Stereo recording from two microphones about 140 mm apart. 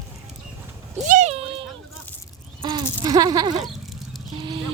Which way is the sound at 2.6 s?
30° right (ahead or behind).